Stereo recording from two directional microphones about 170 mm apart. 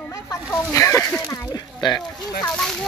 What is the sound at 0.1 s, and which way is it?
Speech, 15° left (ahead or behind).